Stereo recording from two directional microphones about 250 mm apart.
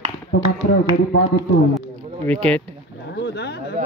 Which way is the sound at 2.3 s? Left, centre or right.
Centre.